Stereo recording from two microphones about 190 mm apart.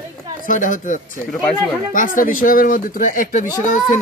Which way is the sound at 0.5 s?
45° left (ahead or behind).